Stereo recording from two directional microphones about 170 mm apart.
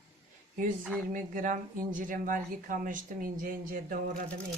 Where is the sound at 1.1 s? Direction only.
50° right (ahead or behind).